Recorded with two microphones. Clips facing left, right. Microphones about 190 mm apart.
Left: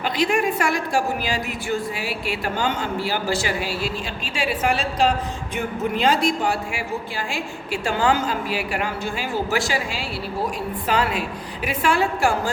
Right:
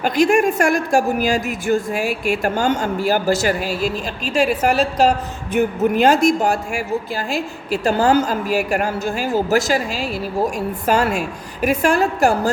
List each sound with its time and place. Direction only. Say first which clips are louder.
0.0 s a woman's voice: right 6 dB; 45° right (ahead or behind)